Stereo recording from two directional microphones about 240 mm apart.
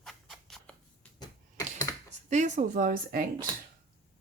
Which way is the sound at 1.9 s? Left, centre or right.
Centre.